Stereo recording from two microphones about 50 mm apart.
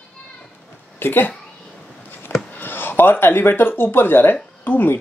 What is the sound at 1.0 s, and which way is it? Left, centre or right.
Speech, left.